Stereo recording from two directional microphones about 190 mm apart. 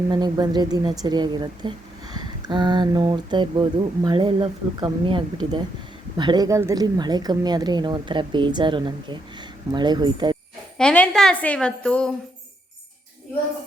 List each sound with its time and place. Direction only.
0.1 s speech: 20° right (ahead or behind)
10.8 s a woman's voice: 5° left (ahead or behind)